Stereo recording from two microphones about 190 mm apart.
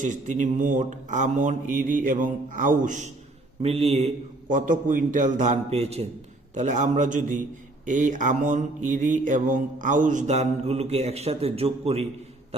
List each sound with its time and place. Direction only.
0.0 s speech: 40° right (ahead or behind)
3.6 s mantra: 35° right (ahead or behind)